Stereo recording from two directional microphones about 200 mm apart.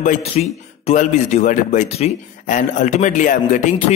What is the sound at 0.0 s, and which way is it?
Speech, 35° left (ahead or behind).